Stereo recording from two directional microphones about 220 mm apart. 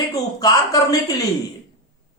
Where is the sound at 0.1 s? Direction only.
15° left (ahead or behind).